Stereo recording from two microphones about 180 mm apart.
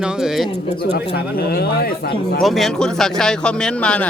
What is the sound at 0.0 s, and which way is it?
Speech, centre (ahead or behind).